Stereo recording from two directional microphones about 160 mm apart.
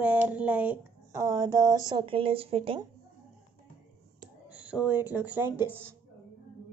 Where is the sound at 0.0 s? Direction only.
10° right (ahead or behind); by 2.8 s 35° right (ahead or behind).